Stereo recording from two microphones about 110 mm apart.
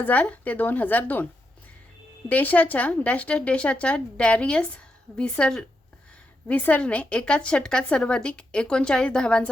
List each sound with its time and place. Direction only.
0.0 s a woman's voice: 15° left (ahead or behind)
2.3 s a woman's voice: 15° left (ahead or behind)